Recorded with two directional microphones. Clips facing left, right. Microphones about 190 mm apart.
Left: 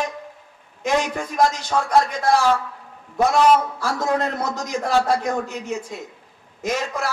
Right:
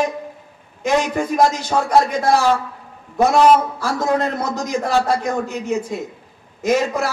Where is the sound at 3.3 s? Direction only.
25° right (ahead or behind).